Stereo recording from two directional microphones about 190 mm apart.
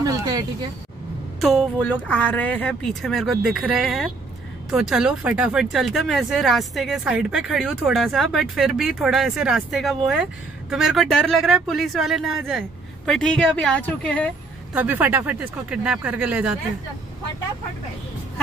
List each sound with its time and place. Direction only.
0.0 s a sound: 20° right (ahead or behind)
1.4 s speech: centre (ahead or behind)
14.7 s speech: 5° right (ahead or behind)